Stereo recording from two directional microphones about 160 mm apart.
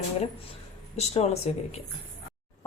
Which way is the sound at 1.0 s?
40° left (ahead or behind).